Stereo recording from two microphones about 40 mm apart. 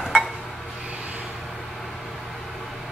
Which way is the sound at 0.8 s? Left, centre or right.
Right.